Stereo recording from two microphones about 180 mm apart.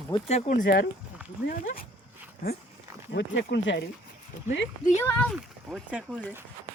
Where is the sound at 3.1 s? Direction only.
80° left.